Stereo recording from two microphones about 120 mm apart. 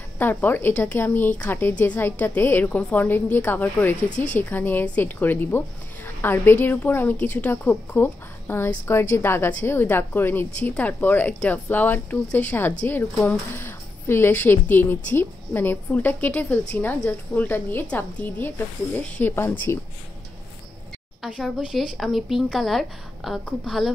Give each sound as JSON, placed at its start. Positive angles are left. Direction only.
{"t": 0.2, "sound": "a woman's voice", "side_deg": 15}
{"t": 4.1, "sound": "a woman's voice", "side_deg": 90}
{"t": 4.4, "sound": "a woman's voice", "side_deg": 15}
{"t": 21.2, "sound": "a woman's voice", "side_deg": -5}